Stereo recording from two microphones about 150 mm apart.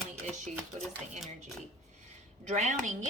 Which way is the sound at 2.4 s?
50° right (ahead or behind).